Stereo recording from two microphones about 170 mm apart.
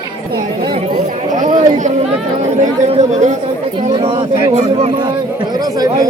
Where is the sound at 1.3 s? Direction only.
45° right (ahead or behind); by 5.9 s 20° right (ahead or behind).